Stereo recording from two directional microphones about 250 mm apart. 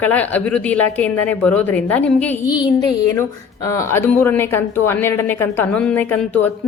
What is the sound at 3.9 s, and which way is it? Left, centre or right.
A woman's voice, centre.